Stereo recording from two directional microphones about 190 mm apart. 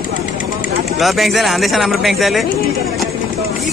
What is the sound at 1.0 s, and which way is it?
Speech, centre (ahead or behind).